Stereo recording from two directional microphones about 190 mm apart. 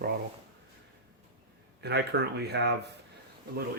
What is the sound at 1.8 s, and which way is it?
Speech, 60° right (ahead or behind).